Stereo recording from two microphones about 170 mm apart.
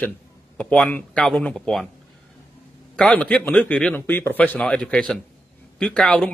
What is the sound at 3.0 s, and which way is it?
A man's voice, 5° left (ahead or behind).